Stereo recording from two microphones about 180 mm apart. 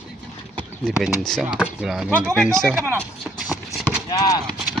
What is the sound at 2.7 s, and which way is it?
Speech, 10° right (ahead or behind).